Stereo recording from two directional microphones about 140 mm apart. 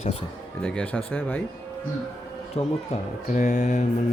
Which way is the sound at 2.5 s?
45° left (ahead or behind).